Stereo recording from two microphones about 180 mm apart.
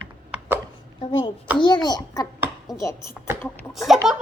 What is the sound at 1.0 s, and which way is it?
A child's voice, 30° left (ahead or behind).